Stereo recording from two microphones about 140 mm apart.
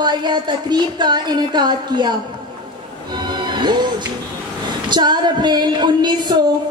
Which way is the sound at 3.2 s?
30° right (ahead or behind).